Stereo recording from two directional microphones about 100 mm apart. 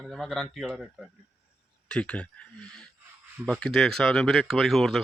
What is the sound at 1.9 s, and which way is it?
Speech, 10° left (ahead or behind).